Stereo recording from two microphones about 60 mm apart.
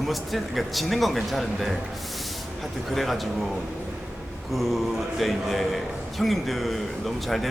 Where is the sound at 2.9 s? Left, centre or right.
Centre.